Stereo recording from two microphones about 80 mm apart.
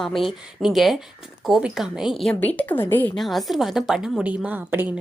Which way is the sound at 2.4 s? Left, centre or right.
Left.